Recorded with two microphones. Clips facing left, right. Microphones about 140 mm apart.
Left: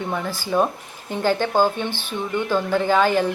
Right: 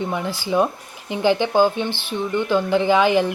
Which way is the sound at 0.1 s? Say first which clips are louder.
Right 1 dB; 15° right (ahead or behind).